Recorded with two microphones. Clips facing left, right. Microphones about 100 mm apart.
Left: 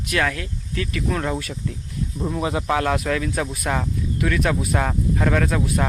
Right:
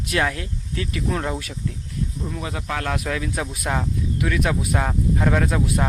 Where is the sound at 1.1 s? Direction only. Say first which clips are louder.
Left 2 dB; 10° right (ahead or behind).